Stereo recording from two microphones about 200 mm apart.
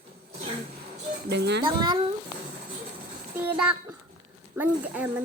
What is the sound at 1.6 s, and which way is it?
Speech, 25° right (ahead or behind).